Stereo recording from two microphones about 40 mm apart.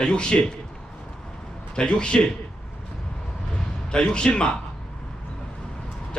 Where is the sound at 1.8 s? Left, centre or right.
Left.